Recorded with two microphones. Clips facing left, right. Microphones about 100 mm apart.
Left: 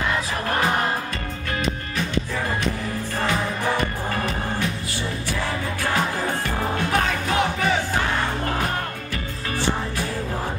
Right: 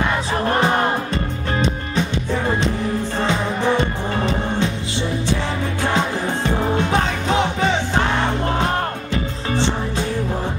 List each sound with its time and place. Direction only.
1.1 s music: 25° right (ahead or behind)
3.3 s music: 25° right (ahead or behind)
5.9 s music: 25° right (ahead or behind)
9.1 s music: 25° right (ahead or behind)